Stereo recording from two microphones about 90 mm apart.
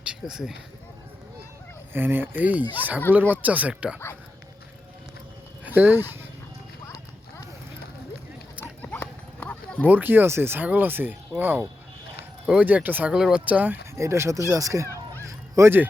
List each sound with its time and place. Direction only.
0.0 s speech: 10° right (ahead or behind)
1.9 s speech: 25° right (ahead or behind)
5.6 s speech: 20° right (ahead or behind)
8.8 s dog: 20° left (ahead or behind)
9.8 s speech: 20° right (ahead or behind)
13.1 s speech: 10° right (ahead or behind)
13.9 s speech: 30° right (ahead or behind)
15.3 s honk: 35° right (ahead or behind)